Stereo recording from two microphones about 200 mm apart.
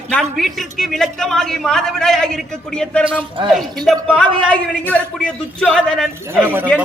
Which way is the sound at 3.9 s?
5° left (ahead or behind).